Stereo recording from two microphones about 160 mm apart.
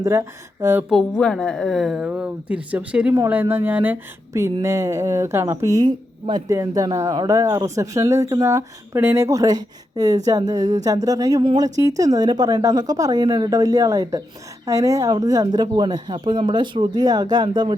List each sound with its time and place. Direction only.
0.0 s speech: 15° right (ahead or behind)
0.9 s a woman's voice: centre (ahead or behind); by 17.7 s 25° right (ahead or behind)